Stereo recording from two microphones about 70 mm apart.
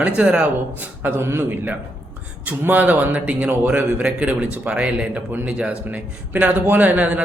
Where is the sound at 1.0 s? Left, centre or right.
Right.